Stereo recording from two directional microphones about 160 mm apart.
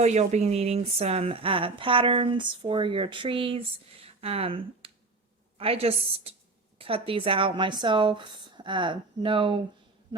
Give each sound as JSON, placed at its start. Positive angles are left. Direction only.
{"t": 0.0, "sound": "a woman's voice", "side_deg": -45}